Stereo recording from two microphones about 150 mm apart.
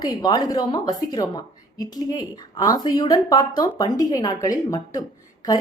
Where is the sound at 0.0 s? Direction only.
25° left (ahead or behind).